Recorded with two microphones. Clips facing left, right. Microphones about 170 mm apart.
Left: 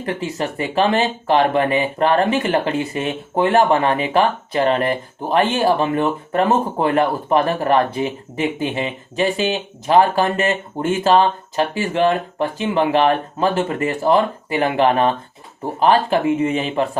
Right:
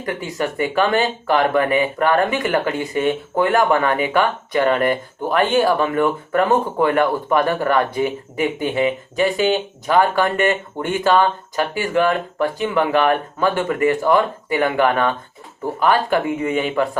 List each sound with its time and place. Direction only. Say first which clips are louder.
0.0 s speech: even; 30° left (ahead or behind)